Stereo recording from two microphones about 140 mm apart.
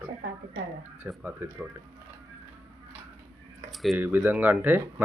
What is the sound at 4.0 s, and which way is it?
Speech, 10° right (ahead or behind).